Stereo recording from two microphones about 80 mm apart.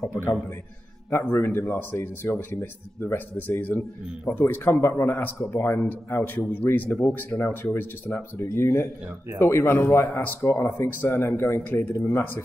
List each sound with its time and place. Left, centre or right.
1.2 s a man's voice: left